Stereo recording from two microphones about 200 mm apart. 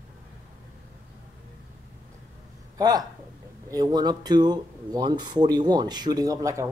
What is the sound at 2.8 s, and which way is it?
Speech, 20° right (ahead or behind).